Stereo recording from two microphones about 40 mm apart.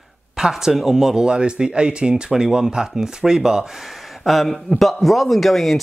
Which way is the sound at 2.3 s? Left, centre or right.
Centre.